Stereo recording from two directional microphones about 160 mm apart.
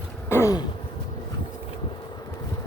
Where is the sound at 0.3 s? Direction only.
15° left (ahead or behind).